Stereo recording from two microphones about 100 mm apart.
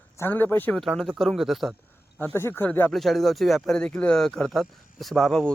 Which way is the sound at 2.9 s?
Centre (ahead or behind).